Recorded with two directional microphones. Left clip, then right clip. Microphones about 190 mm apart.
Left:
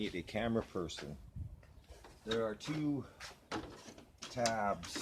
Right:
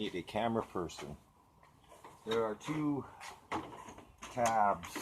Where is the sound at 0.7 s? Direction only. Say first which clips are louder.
Right 2 dB; 55° left (ahead or behind).